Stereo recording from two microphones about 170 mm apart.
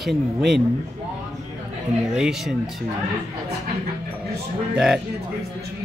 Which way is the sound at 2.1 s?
5° right (ahead or behind).